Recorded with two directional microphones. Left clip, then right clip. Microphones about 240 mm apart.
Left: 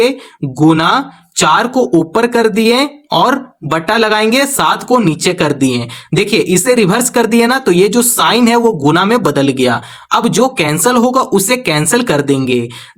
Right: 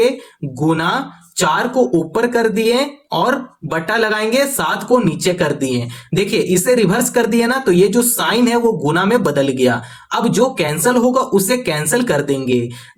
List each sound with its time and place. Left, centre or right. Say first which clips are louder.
0.6 s speech: left 7 dB; left